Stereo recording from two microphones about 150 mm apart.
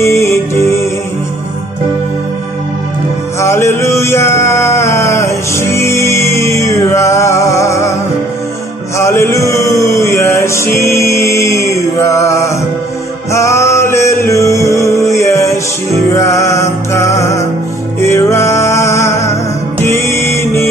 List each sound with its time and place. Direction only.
0.0 s music: 20° left (ahead or behind)
3.3 s male singing: 20° left (ahead or behind)
8.9 s chant: 20° left (ahead or behind)
13.3 s music: 20° left (ahead or behind)